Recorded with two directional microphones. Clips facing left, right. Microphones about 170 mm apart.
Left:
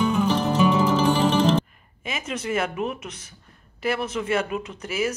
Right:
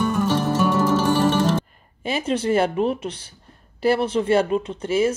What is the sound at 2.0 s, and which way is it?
Speech, 30° right (ahead or behind).